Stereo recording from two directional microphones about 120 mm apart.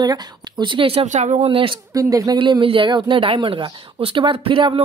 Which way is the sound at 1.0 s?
80° right.